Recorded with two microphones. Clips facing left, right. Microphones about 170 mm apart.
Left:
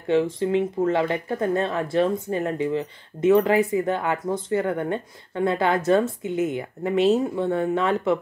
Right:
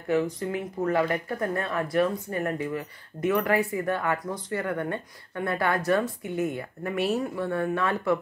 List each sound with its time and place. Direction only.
0.1 s speech: 25° left (ahead or behind)